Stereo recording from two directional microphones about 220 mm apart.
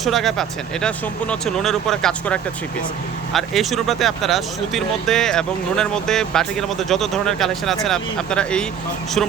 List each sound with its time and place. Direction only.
0.0 s speech: centre (ahead or behind)